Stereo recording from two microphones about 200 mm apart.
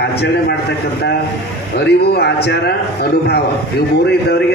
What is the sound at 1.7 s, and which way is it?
A man's voice, 55° left (ahead or behind).